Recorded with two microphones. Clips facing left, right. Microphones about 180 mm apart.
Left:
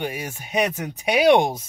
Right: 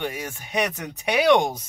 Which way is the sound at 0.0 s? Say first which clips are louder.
Left 1 dB; 10° left (ahead or behind).